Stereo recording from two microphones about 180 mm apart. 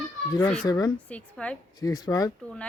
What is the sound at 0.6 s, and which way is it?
Speech, 20° left (ahead or behind).